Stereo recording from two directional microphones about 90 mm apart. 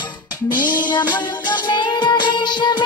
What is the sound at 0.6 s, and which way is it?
Music, 20° right (ahead or behind).